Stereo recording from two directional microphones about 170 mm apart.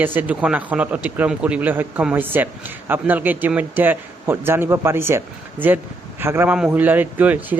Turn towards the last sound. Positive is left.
turn(degrees=-10)  # may be behind; listen again after turning